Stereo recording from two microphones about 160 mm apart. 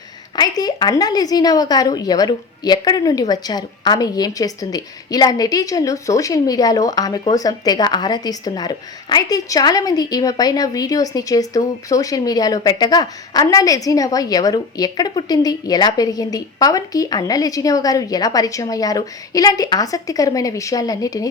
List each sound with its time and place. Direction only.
0.3 s speech: 25° left (ahead or behind)